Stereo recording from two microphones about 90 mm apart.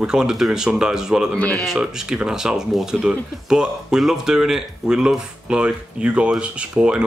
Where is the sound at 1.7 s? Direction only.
5° right (ahead or behind).